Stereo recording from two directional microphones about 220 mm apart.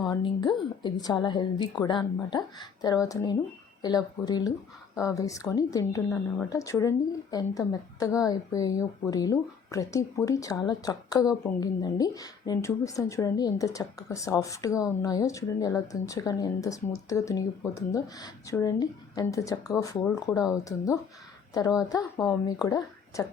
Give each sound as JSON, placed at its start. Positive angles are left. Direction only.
{"t": 0.1, "sound": "a woman's voice", "side_deg": 20}